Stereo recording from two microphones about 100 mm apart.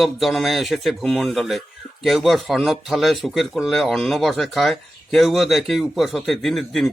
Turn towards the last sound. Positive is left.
turn(degrees=5)  # may be behind; listen again after turning